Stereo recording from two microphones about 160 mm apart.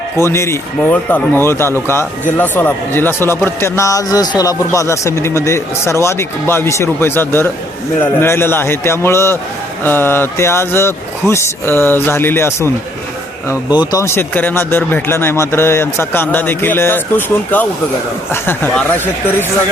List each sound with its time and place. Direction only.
0.2 s speech: 15° left (ahead or behind)
13.9 s speech: 15° left (ahead or behind)